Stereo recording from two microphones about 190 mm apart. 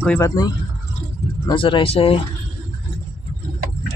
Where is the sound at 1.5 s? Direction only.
25° left (ahead or behind).